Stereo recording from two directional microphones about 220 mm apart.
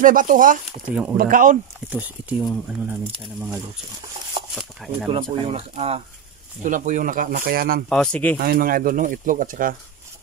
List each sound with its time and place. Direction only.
0.0 s speech: 35° right (ahead or behind)
0.8 s speech: 5° right (ahead or behind)
1.1 s speech: 40° right (ahead or behind)
1.9 s speech: 5° right (ahead or behind)
5.1 s speech: 25° right (ahead or behind); by 7.8 s 40° right (ahead or behind)
7.9 s speech: 5° left (ahead or behind)
8.4 s speech: 40° right (ahead or behind)